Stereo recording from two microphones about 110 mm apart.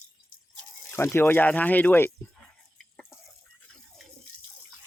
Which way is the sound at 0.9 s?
20° left (ahead or behind).